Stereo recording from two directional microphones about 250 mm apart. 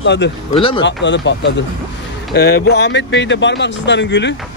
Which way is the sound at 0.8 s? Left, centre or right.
Left.